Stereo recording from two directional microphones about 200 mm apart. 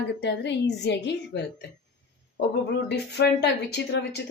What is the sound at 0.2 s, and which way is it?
Speech, 60° left (ahead or behind).